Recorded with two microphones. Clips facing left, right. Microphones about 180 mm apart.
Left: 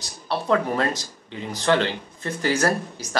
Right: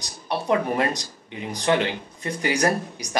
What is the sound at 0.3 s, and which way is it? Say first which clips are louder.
Speech: left 1 dB; 15° right (ahead or behind).